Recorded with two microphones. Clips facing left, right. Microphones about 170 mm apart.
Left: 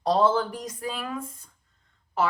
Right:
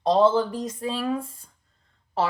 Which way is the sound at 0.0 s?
25° right (ahead or behind).